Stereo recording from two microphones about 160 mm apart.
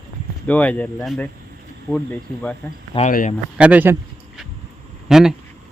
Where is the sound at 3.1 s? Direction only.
60° left (ahead or behind).